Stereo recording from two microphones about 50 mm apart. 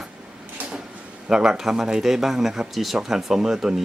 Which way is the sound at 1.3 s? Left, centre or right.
Centre.